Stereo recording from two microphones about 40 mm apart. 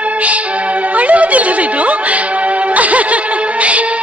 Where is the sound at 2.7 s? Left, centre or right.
Right.